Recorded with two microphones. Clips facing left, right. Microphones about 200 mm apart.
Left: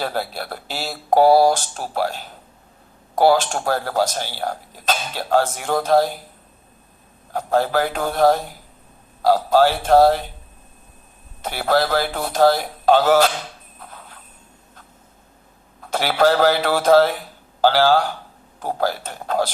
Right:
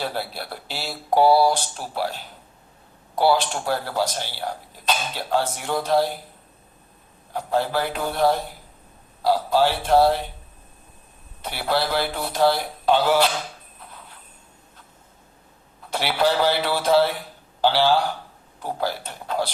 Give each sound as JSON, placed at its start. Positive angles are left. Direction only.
{"t": 0.0, "sound": "speech", "side_deg": 45}
{"t": 3.2, "sound": "speech", "side_deg": 45}
{"t": 7.3, "sound": "speech", "side_deg": 45}
{"t": 11.4, "sound": "speech", "side_deg": 45}
{"t": 15.9, "sound": "speech", "side_deg": 45}